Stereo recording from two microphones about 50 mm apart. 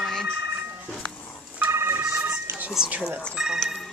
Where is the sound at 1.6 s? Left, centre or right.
Right.